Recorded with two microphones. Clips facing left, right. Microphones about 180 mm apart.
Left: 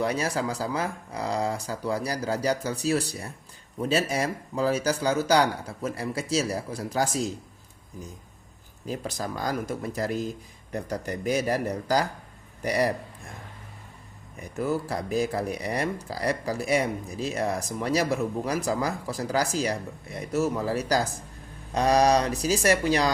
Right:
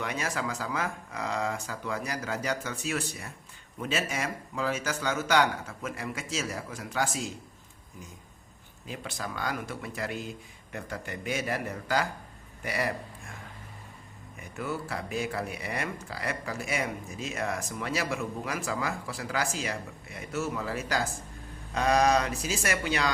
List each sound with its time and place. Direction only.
0.0 s speech: 35° left (ahead or behind)
8.9 s speech: 40° left (ahead or behind)
14.3 s speech: 35° left (ahead or behind)